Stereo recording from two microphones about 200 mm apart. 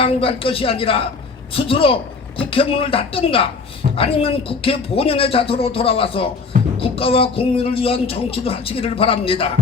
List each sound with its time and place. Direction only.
0.0 s speech: 30° left (ahead or behind)